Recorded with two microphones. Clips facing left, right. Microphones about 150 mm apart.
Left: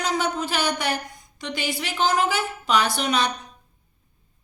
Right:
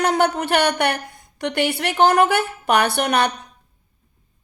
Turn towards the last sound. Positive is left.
turn(degrees=-60)  # may be behind; listen again after turning